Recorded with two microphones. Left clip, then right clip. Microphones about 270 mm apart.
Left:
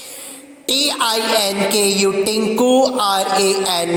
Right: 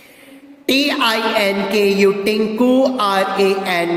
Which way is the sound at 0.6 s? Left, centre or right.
Left.